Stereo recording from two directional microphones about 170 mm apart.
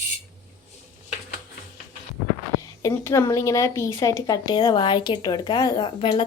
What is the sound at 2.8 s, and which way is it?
A woman's voice, 15° left (ahead or behind).